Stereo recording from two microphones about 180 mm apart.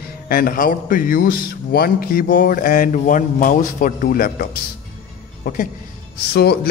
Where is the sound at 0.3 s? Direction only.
50° left (ahead or behind).